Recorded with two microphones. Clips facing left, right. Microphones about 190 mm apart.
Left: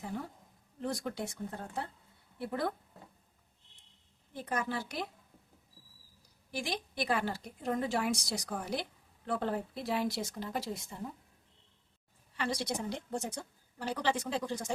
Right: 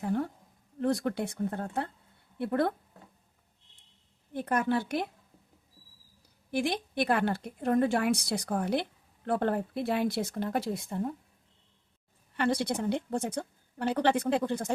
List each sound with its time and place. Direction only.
0.0 s a woman's voice: 60° right (ahead or behind)
4.4 s a woman's voice: 60° right (ahead or behind)
6.5 s a woman's voice: 60° right (ahead or behind)
12.3 s a woman's voice: 55° right (ahead or behind)